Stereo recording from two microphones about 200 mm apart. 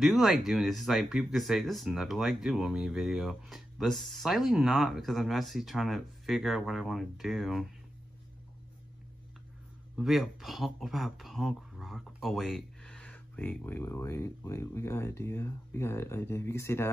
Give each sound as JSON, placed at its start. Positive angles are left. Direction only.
{"t": 0.0, "sound": "speech", "side_deg": 0}
{"t": 9.9, "sound": "speech", "side_deg": 0}